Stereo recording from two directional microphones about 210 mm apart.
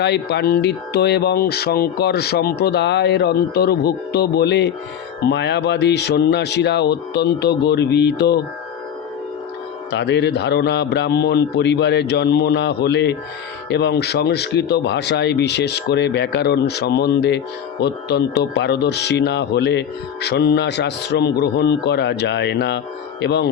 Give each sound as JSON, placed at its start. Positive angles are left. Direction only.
{"t": 0.0, "sound": "speech", "side_deg": 50}
{"t": 9.9, "sound": "speech", "side_deg": 55}